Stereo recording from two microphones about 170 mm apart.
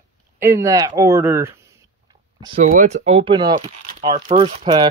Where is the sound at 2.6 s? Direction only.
45° right (ahead or behind).